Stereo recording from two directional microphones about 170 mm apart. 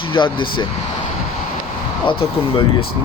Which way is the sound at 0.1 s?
30° left (ahead or behind).